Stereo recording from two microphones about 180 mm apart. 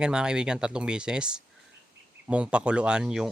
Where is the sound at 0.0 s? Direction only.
5° right (ahead or behind).